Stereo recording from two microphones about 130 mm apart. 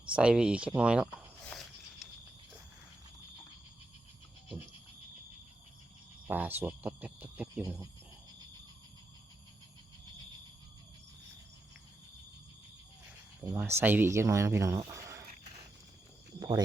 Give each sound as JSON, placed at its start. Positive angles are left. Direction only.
{"t": 0.1, "sound": "speech", "side_deg": -10}
{"t": 1.5, "sound": "a sound", "side_deg": 5}
{"t": 6.2, "sound": "speech", "side_deg": -15}
{"t": 13.4, "sound": "speech", "side_deg": -20}
{"t": 16.4, "sound": "speech", "side_deg": -35}